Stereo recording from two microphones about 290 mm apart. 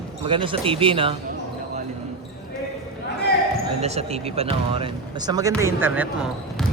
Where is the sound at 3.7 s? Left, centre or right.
Right; by 6.7 s centre.